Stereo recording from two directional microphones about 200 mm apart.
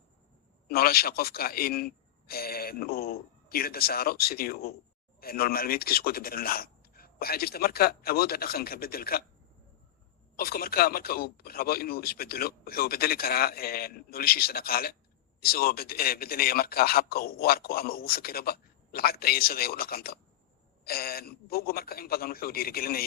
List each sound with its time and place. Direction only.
0.7 s a man's voice: 50° left (ahead or behind)
10.3 s a man's voice: 50° left (ahead or behind)